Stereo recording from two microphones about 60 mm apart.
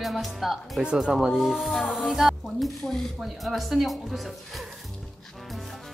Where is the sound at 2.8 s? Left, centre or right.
Centre.